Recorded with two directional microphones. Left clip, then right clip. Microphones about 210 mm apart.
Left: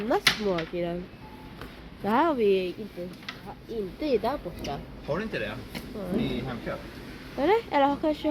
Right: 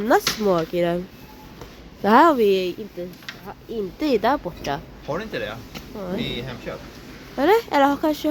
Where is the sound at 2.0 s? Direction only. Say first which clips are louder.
Right 9 dB; 25° right (ahead or behind).